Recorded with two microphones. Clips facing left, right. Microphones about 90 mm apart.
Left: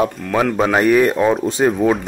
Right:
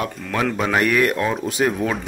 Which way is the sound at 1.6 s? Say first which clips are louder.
Left 3 dB; 15° left (ahead or behind).